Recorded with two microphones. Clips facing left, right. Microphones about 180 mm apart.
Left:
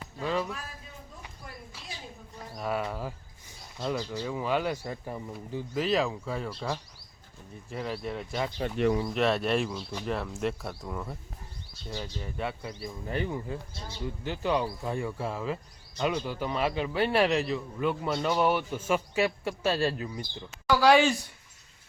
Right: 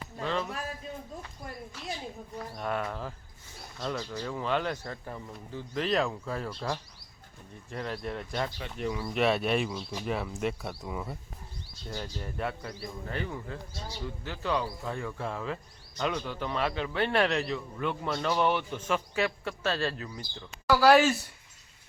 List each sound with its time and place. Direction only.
0.2 s music: 10° left (ahead or behind)
2.6 s speech: 5° left (ahead or behind)
12.7 s speech: 20° left (ahead or behind)
18.1 s speech: 20° left (ahead or behind)
18.3 s speech: 5° left (ahead or behind)
20.7 s speech: 5° right (ahead or behind)